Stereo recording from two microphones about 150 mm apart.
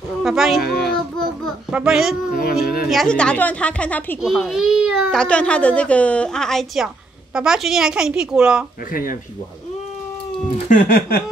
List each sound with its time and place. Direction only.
0.2 s a sound: centre (ahead or behind)
0.6 s child singing: 90° left
1.4 s a child's voice: 5° right (ahead or behind)
2.6 s a woman's voice: 75° left (ahead or behind)
2.9 s a woman's voice: 5° left (ahead or behind)
4.2 s a woman's voice: 5° right (ahead or behind)
5.2 s a woman's voice: 10° left (ahead or behind)
10.7 s a sound: 90° left